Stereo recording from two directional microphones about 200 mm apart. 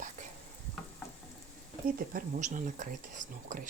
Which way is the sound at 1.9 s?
45° right (ahead or behind).